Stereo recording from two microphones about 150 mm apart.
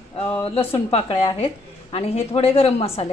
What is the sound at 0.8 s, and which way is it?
A woman's voice, 40° left (ahead or behind).